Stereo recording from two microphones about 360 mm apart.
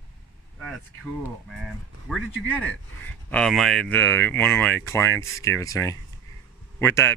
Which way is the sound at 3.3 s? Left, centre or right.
Centre.